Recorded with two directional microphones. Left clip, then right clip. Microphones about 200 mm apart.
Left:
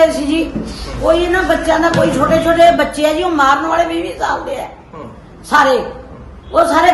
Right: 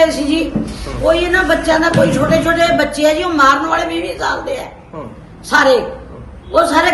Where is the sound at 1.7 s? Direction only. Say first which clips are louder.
Even; 35° left (ahead or behind).